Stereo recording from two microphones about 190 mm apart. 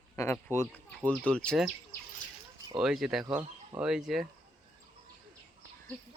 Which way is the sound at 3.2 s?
20° right (ahead or behind).